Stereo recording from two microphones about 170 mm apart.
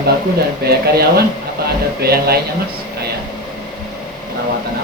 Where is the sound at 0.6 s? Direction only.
65° right (ahead or behind).